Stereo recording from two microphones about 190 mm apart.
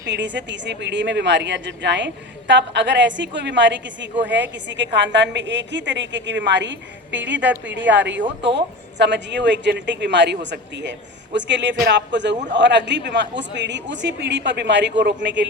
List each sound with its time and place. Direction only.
0.1 s a woman's voice: 70° right (ahead or behind)